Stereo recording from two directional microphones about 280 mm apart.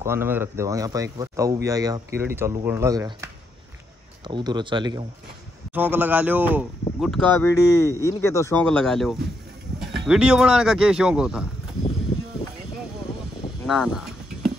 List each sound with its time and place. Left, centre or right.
0.0 s speech: centre
4.3 s speech: centre
13.7 s a sound: centre